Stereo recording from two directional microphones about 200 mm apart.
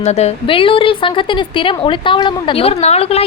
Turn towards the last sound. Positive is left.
turn(degrees=30)  # may be behind; listen again after turning